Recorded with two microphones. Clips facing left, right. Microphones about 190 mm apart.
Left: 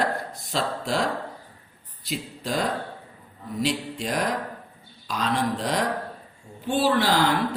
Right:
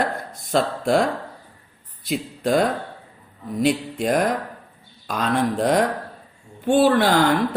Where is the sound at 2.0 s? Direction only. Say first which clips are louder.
Right 8 dB; 55° right (ahead or behind).